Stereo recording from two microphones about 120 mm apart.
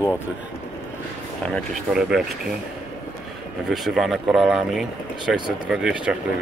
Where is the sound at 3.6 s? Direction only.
Centre (ahead or behind).